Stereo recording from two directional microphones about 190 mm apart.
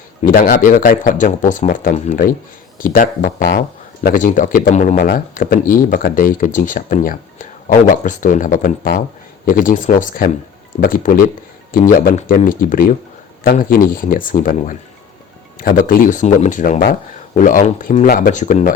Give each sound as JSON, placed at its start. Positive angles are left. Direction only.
{"t": 0.2, "sound": "speech", "side_deg": 45}